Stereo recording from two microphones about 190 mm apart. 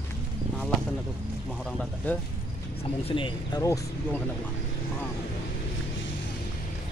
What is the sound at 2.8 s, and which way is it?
Speech, 30° left (ahead or behind).